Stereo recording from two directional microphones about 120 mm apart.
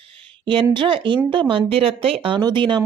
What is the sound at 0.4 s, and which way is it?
A woman's voice, 40° right (ahead or behind).